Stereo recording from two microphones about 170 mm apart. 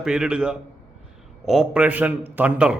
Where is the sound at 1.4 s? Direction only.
5° right (ahead or behind).